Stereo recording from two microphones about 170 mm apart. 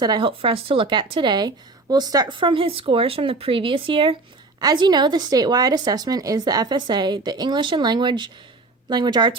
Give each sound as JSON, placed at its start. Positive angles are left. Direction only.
{"t": 0.0, "sound": "a woman's voice", "side_deg": -25}